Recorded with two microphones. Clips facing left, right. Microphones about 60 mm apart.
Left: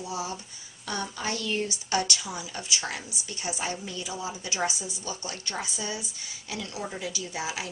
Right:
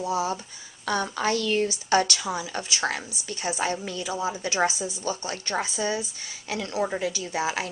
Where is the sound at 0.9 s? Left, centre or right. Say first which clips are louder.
Right 7 dB; right.